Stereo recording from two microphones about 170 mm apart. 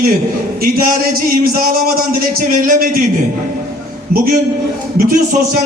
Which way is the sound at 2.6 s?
55° right (ahead or behind).